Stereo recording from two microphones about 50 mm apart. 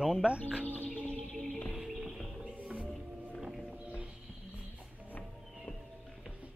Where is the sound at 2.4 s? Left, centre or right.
Right.